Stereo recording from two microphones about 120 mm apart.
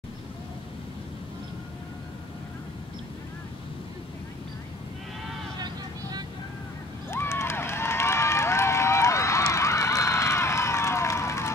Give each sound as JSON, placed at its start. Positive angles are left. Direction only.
{"t": 5.6, "sound": "vehicle", "side_deg": -35}
{"t": 7.1, "sound": "run", "side_deg": 20}